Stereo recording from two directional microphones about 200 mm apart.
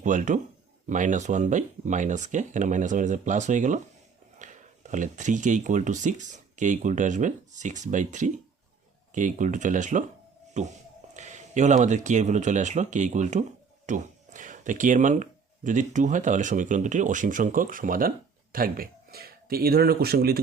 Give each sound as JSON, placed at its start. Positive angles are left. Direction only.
{"t": 0.0, "sound": "speech", "side_deg": -40}